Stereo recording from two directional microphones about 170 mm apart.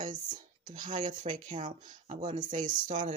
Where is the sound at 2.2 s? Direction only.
30° right (ahead or behind).